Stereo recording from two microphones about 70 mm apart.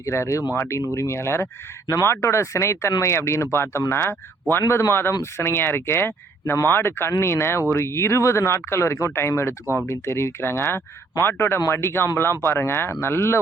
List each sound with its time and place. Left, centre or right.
0.0 s speech: left
0.5 s speech: left
0.8 s speech: left